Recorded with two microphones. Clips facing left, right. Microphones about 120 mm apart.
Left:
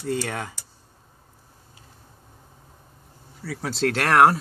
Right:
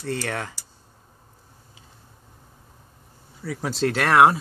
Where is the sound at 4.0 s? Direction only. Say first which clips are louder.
Right 1 dB; 5° right (ahead or behind).